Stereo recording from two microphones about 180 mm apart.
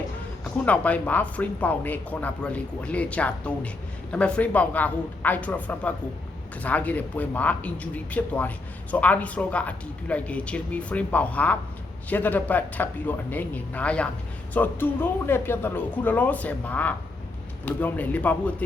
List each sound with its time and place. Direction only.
0.5 s speech: 10° left (ahead or behind)